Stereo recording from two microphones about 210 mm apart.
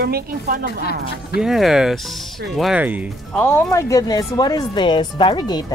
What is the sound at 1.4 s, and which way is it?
Speech, centre (ahead or behind).